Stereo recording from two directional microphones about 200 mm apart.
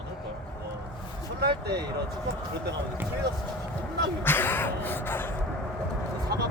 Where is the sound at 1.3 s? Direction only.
55° right (ahead or behind).